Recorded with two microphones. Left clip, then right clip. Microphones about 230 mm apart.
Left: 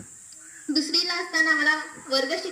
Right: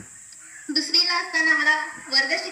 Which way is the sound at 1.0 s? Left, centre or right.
Centre.